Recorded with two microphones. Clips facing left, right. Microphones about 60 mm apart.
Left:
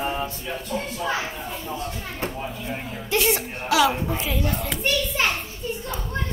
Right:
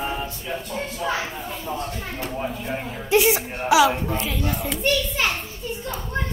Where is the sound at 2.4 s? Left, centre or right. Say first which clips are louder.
Right 3 dB; centre.